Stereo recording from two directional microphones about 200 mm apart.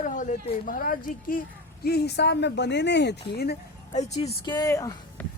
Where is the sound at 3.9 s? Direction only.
30° left (ahead or behind).